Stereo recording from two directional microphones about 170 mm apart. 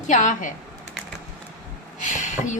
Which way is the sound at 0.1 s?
45° left (ahead or behind).